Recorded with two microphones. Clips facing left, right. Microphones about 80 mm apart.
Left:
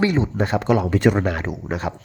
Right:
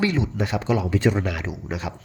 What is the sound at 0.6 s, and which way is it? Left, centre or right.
Speech, left.